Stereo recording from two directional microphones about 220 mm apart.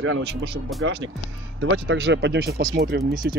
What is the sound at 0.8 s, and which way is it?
Speech, 60° right (ahead or behind).